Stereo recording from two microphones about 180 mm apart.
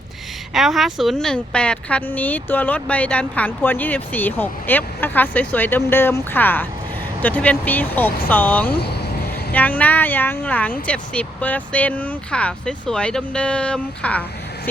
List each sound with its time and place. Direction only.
0.5 s a woman's voice: centre (ahead or behind)
8.7 s speech: 65° left (ahead or behind)
9.5 s a woman's voice: 10° left (ahead or behind)